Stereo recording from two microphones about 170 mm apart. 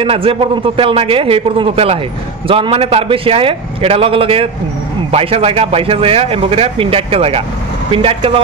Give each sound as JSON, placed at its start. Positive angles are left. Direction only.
{"t": 0.0, "sound": "a man's voice", "side_deg": -30}